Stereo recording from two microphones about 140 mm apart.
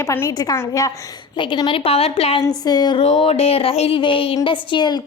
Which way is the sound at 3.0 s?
45° left (ahead or behind).